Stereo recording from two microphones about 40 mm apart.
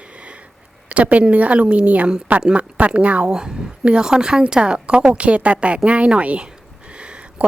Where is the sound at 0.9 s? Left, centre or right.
Right.